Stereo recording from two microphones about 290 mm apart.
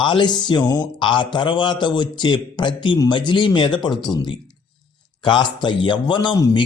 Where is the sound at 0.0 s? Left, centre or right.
Centre.